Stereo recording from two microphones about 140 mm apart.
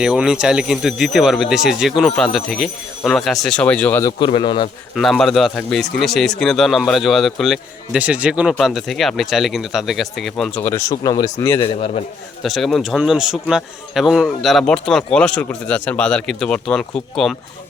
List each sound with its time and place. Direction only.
0.0 s a man's voice: 5° right (ahead or behind)
4.3 s a man's voice: 35° left (ahead or behind)
4.9 s a man's voice: centre (ahead or behind)
7.9 s a man's voice: 10° right (ahead or behind); by 11.6 s 20° left (ahead or behind)
11.6 s a man's voice: 40° left (ahead or behind)
12.4 s a man's voice: centre (ahead or behind)